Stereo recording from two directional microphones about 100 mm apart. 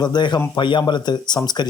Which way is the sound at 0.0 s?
45° left (ahead or behind).